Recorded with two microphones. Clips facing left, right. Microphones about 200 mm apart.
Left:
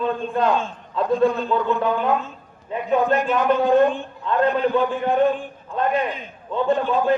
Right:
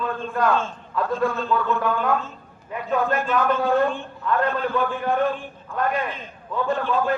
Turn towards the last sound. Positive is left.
turn(degrees=20)  # may be behind; listen again after turning